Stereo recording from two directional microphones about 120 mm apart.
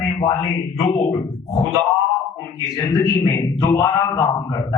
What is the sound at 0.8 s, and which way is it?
Speech, 65° left (ahead or behind).